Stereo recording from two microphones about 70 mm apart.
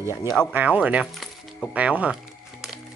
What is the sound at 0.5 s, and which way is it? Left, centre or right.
Speech, right.